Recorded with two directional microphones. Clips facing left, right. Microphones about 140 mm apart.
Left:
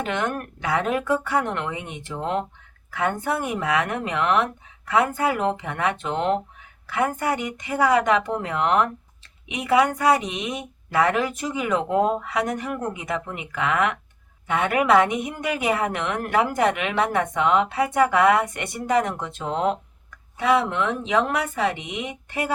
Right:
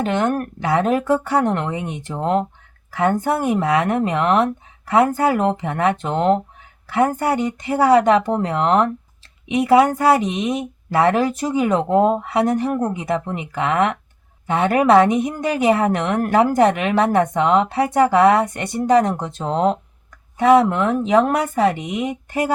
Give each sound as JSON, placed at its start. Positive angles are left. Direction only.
{"t": 0.0, "sound": "a woman's voice", "side_deg": -35}